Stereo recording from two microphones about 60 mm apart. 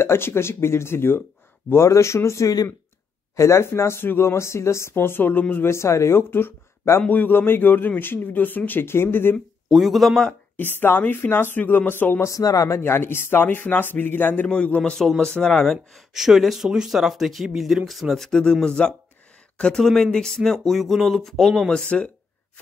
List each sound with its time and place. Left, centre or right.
0.0 s speech: left
1.7 s speech: left
5.7 s a man's voice: left
9.7 s speech: centre
10.5 s a man's voice: left
12.2 s a man's voice: left
14.5 s speech: centre
16.1 s speech: centre